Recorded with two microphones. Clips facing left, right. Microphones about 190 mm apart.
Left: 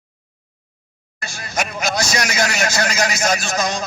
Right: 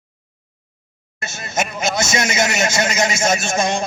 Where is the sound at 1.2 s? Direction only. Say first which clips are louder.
Right 2 dB; 25° right (ahead or behind).